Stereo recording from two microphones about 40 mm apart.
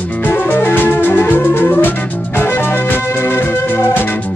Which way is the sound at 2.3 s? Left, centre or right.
Left.